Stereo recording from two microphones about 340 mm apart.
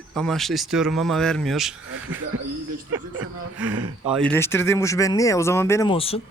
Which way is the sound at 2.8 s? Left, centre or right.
Right.